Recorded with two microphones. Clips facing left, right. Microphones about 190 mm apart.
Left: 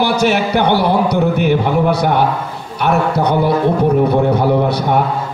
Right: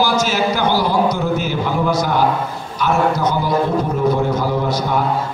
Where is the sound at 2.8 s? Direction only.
60° left (ahead or behind).